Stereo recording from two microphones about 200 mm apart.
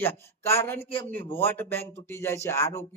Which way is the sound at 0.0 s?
10° left (ahead or behind).